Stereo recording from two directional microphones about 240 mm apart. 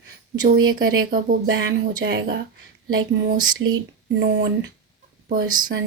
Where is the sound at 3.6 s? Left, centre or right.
Right.